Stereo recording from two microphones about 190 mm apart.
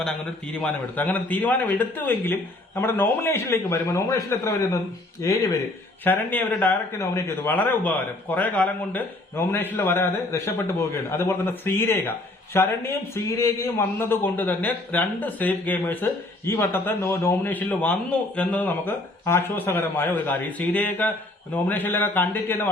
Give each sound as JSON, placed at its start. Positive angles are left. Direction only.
{"t": 0.6, "sound": "a man's voice", "side_deg": 10}